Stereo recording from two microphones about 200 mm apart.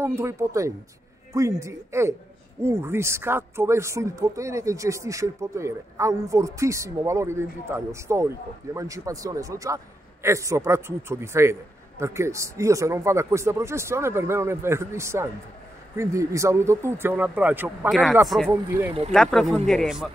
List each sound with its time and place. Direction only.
0.0 s speech: 15° right (ahead or behind)